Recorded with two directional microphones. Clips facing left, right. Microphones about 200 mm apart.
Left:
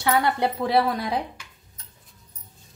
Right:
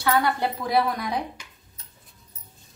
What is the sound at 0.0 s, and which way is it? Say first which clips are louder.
Speech: left 1 dB; 20° left (ahead or behind).